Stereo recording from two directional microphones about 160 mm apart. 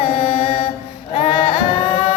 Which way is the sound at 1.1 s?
35° left (ahead or behind).